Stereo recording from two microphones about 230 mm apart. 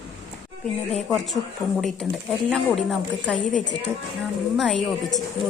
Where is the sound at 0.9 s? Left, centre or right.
Centre.